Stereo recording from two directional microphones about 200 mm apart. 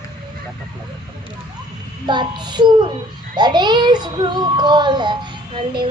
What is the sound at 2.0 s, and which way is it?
A child's voice, 20° right (ahead or behind).